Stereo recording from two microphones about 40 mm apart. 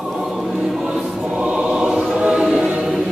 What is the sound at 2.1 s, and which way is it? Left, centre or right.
Music, centre.